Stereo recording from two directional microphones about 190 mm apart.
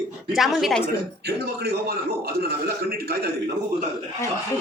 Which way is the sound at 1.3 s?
55° right (ahead or behind).